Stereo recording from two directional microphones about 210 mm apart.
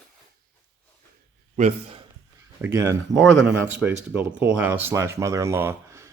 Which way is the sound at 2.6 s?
10° right (ahead or behind).